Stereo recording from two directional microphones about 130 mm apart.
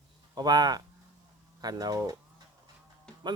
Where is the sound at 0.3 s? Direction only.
30° right (ahead or behind).